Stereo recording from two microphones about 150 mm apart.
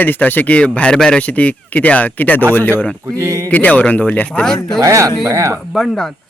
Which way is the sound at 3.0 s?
20° right (ahead or behind).